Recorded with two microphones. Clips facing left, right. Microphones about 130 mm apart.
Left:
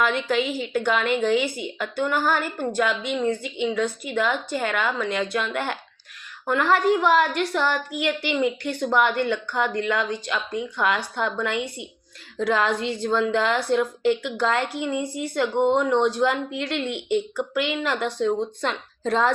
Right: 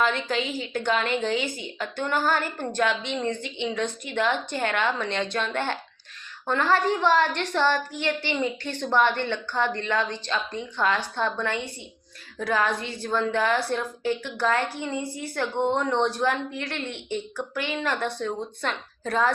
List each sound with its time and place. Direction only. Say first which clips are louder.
0.0 s speech: left 3 dB; 10° left (ahead or behind)
8.4 s a woman's voice: left 4 dB; 10° left (ahead or behind)